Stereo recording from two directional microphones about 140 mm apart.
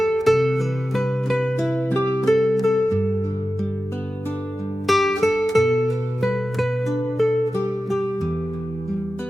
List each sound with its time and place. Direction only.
0.0 s music: centre (ahead or behind)
4.9 s music: centre (ahead or behind)